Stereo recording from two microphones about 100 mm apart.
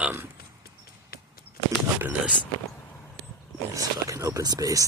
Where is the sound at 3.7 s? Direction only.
35° right (ahead or behind).